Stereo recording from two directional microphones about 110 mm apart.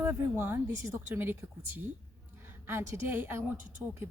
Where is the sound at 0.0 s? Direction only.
20° right (ahead or behind).